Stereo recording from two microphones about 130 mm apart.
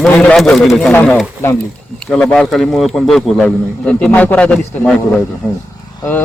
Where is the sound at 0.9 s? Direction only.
15° left (ahead or behind).